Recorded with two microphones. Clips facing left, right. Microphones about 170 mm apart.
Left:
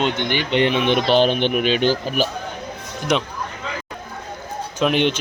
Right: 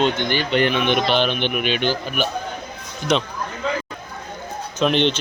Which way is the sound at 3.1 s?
15° left (ahead or behind).